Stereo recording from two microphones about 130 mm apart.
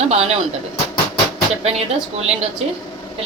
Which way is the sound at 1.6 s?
55° right (ahead or behind).